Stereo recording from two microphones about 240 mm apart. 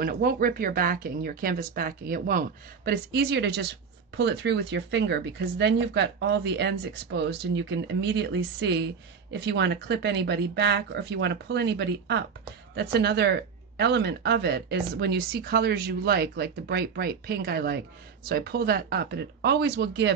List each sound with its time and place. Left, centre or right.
0.0 s speech: right